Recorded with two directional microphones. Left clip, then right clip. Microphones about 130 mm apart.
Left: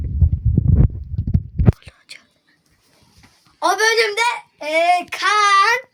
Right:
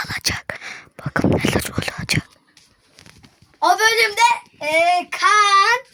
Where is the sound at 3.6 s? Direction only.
10° left (ahead or behind).